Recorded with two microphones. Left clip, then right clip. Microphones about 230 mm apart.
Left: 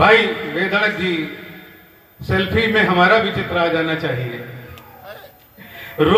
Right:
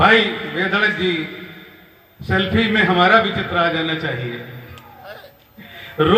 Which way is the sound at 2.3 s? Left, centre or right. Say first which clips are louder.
Left 1 dB; right.